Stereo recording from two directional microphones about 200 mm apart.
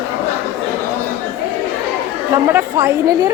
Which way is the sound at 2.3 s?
15° right (ahead or behind).